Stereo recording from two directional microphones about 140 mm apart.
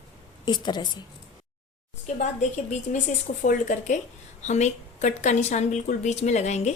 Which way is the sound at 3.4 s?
65° left (ahead or behind).